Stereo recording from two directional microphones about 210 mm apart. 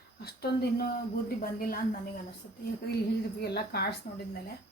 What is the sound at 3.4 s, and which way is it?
Speech, 50° left (ahead or behind).